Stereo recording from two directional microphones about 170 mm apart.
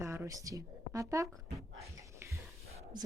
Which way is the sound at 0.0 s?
15° right (ahead or behind).